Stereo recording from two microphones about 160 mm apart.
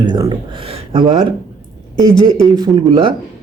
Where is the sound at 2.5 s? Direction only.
25° right (ahead or behind).